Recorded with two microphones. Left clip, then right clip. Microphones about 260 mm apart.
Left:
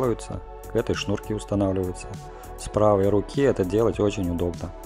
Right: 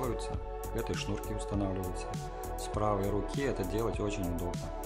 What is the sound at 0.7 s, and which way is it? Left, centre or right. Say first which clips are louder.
Speech: left 12 dB; left.